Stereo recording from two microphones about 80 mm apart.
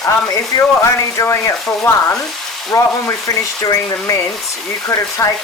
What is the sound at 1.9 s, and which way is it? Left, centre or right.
Speech, left.